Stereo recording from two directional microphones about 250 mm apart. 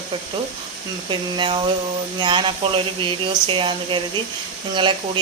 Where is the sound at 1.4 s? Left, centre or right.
Centre.